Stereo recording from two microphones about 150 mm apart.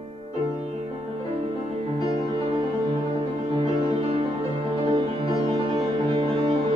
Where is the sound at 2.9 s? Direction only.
35° right (ahead or behind).